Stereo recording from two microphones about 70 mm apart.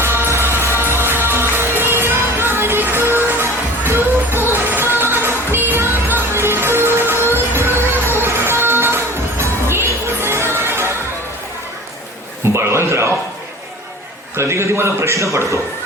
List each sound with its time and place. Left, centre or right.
0.0 s music: right
12.5 s a sound: right
14.3 s a man's voice: right